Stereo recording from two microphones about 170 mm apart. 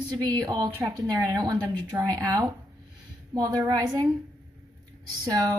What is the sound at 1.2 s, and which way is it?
A woman's voice, 25° right (ahead or behind).